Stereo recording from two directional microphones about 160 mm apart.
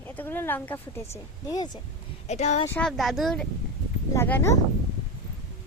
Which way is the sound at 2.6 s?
5° left (ahead or behind).